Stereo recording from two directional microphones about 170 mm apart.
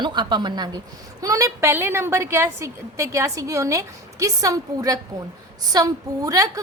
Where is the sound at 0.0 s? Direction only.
25° right (ahead or behind).